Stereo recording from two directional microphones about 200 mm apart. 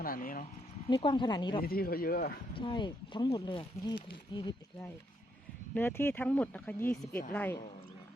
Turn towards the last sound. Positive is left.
turn(degrees=10)  # may be behind; listen again after turning